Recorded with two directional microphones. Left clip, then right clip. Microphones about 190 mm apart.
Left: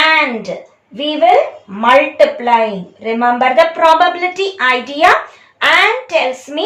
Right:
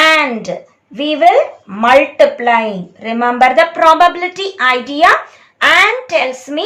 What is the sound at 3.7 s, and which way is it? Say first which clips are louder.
A child's voice: right 1 dB; 15° right (ahead or behind).